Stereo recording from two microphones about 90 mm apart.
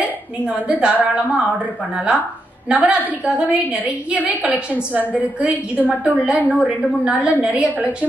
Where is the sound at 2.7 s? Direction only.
15° right (ahead or behind).